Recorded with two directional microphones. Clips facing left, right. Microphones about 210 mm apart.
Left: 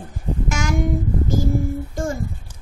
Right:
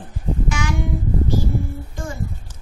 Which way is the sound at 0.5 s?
45° left (ahead or behind).